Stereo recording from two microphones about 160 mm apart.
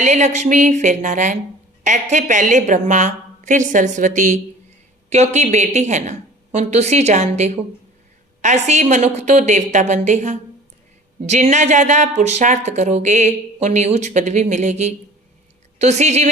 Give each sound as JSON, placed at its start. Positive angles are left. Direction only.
{"t": 0.0, "sound": "speech", "side_deg": -45}